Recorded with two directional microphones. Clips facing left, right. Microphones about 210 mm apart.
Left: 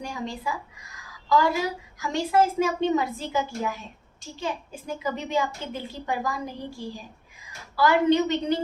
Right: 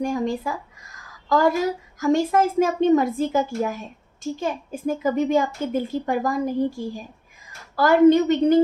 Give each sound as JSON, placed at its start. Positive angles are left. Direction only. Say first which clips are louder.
{"t": 0.0, "sound": "a woman's voice", "louder": "right 9 dB", "side_deg": -45}